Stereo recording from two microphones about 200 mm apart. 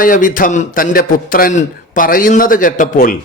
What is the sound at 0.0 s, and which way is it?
A man's voice, 40° left (ahead or behind).